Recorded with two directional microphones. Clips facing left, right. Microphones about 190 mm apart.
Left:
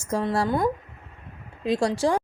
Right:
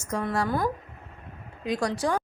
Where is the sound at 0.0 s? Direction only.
30° left (ahead or behind).